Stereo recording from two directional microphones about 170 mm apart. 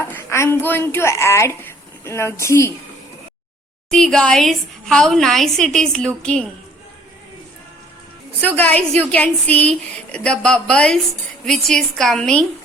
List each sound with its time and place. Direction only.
0.1 s a woman's voice: 15° left (ahead or behind)
3.8 s a woman's voice: 5° left (ahead or behind)
8.4 s a woman's voice: 10° left (ahead or behind)